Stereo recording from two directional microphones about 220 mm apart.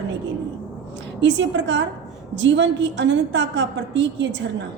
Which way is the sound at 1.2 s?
55° right (ahead or behind).